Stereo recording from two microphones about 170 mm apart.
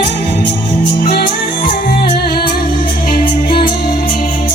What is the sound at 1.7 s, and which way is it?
Music, 65° left (ahead or behind).